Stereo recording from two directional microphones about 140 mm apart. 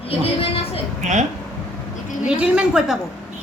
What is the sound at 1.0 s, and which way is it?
Speech, 60° right (ahead or behind).